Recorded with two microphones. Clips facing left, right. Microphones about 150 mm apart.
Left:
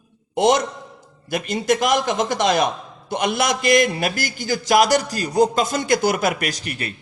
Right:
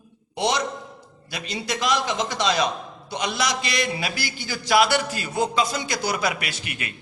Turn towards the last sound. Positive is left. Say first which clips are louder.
# left 6 dB
turn(degrees=35)  # may be behind; listen again after turning